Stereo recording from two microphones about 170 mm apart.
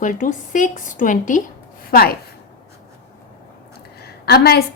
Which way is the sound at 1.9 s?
65° left (ahead or behind).